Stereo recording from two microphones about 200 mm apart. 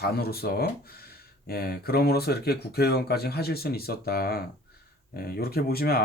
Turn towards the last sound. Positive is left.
turn(degrees=50)  # may be behind; listen again after turning